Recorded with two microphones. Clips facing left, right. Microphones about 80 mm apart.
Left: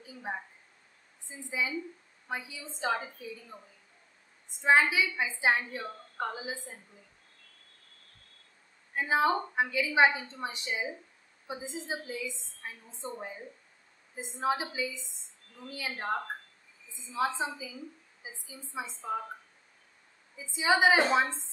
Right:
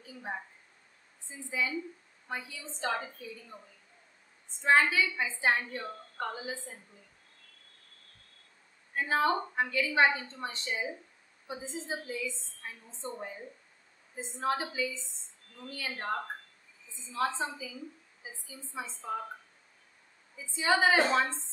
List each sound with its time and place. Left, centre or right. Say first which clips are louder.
0.0 s a sound: left 1 dB; centre
1.3 s a woman's voice: even; centre
4.6 s a woman's voice: left 1 dB; centre
8.9 s a woman's voice: left 1 dB; centre
20.3 s a woman's voice: left 1 dB; centre